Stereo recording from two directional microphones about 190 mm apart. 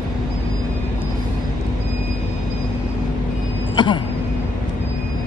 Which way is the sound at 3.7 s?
25° left (ahead or behind).